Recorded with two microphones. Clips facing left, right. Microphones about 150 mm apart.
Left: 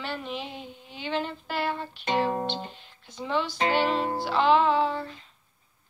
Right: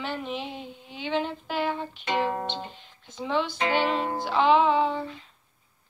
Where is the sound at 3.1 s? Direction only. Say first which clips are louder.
Right 1 dB; 10° right (ahead or behind).